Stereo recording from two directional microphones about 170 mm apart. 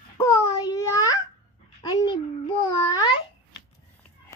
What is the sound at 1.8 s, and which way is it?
Babbling, 20° left (ahead or behind).